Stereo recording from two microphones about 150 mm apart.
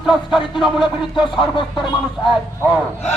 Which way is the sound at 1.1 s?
30° left (ahead or behind).